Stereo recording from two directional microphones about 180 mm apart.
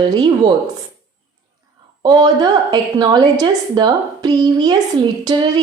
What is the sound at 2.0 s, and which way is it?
A woman's voice, 25° right (ahead or behind).